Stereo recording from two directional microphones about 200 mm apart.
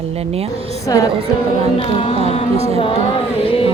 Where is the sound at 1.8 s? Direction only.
25° left (ahead or behind).